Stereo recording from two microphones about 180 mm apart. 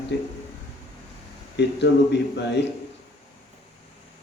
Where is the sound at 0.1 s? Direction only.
70° left (ahead or behind).